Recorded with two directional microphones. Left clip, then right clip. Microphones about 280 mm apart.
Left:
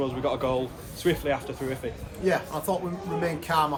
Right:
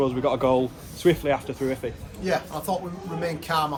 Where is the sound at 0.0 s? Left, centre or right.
Right.